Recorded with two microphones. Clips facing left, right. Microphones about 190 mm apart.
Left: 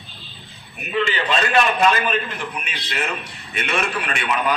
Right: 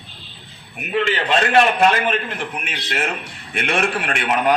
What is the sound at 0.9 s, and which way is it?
A man's voice, 60° right (ahead or behind).